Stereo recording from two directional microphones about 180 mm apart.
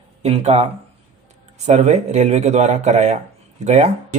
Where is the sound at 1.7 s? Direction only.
40° right (ahead or behind).